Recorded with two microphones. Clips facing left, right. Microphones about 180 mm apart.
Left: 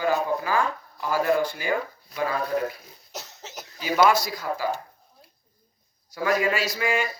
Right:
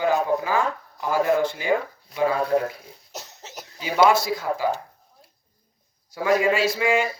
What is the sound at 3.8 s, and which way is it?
Speech, 25° right (ahead or behind).